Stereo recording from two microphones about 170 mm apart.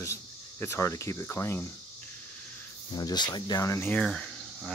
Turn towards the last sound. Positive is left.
turn(degrees=5)  # may be behind; listen again after turning